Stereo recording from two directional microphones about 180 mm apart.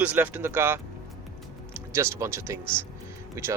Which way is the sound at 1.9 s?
15° right (ahead or behind).